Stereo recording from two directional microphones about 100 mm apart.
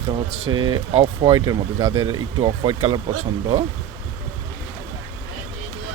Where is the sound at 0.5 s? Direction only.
50° right (ahead or behind).